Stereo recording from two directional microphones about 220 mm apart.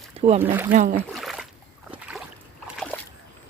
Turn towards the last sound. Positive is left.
turn(degrees=0)  # may be behind; listen again after turning